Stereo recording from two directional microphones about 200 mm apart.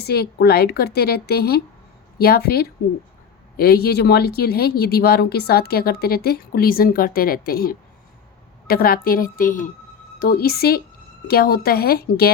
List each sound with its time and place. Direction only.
0.0 s speech: 55° left (ahead or behind)